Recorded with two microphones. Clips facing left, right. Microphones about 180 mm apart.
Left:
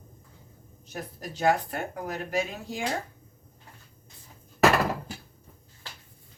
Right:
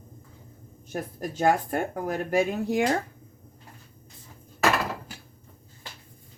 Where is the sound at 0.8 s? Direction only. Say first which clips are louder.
Right 6 dB; 50° right (ahead or behind).